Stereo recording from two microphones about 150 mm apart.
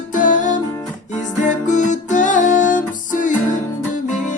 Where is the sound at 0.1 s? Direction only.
60° left (ahead or behind).